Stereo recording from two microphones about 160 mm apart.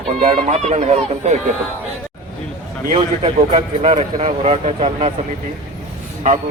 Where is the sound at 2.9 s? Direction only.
40° right (ahead or behind).